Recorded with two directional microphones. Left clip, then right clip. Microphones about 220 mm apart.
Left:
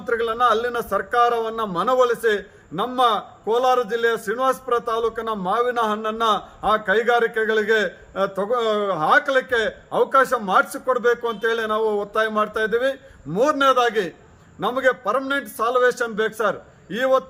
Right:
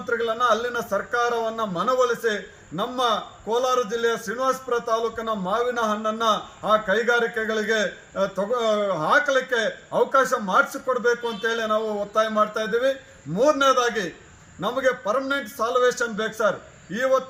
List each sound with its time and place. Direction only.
0.1 s a man's voice: 20° left (ahead or behind)